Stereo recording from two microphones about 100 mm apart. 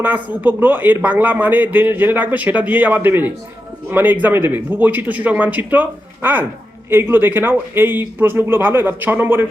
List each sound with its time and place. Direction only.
0.0 s a man's voice: 20° right (ahead or behind)